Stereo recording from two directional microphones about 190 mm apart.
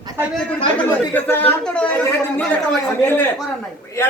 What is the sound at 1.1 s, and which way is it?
Speech, 10° left (ahead or behind).